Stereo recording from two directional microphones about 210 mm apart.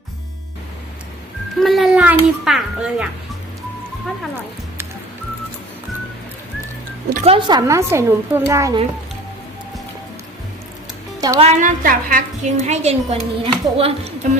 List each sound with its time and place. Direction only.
1.5 s a sound: centre (ahead or behind)
7.3 s a woman's voice: 25° right (ahead or behind)
11.2 s speech: 20° right (ahead or behind)
11.4 s a woman's voice: 35° right (ahead or behind)